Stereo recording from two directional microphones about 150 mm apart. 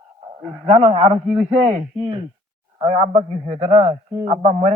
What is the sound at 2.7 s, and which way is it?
A man's voice, 40° right (ahead or behind).